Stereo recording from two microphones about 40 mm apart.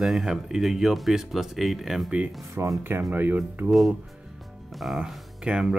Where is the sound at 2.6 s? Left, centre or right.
Right.